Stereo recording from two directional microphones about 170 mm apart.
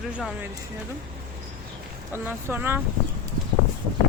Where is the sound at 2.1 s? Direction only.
10° right (ahead or behind).